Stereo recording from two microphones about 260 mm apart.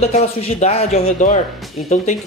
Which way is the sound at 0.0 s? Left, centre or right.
Left.